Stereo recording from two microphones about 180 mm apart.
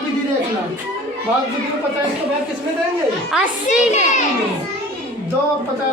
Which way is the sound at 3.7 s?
40° left (ahead or behind).